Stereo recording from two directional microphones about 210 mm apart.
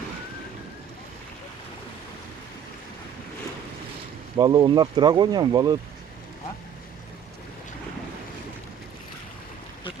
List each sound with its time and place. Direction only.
4.4 s speech: 20° right (ahead or behind)